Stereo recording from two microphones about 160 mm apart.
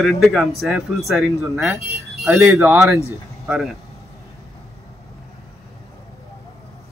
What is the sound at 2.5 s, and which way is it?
Speech, 15° right (ahead or behind).